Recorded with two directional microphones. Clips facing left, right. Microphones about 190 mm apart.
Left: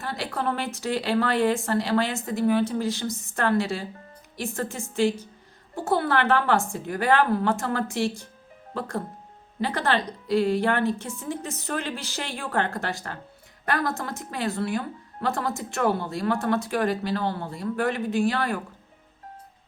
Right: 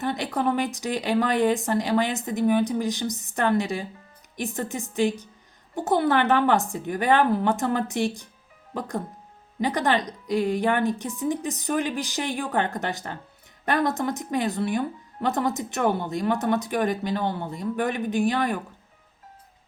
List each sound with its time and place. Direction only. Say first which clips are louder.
0.0 s a woman's voice: right 4 dB; 20° right (ahead or behind)
9.6 s a woman's voice: right 2 dB; 15° right (ahead or behind)